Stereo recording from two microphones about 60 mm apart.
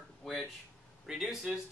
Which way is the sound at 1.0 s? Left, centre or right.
Centre.